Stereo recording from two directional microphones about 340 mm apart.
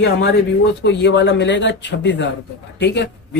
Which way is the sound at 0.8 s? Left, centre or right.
Left.